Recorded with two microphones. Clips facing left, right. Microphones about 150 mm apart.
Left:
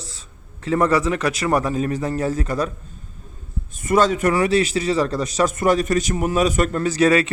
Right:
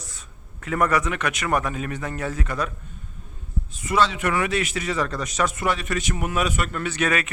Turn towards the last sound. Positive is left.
turn(degrees=30)  # may be behind; listen again after turning